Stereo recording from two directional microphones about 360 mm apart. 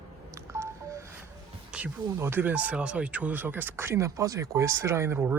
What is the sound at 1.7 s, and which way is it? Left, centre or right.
Speech, centre.